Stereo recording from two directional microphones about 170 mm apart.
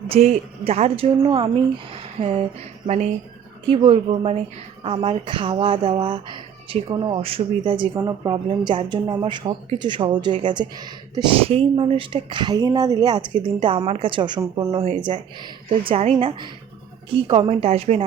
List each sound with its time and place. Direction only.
0.1 s speech: 35° right (ahead or behind)
2.8 s speech: 45° right (ahead or behind)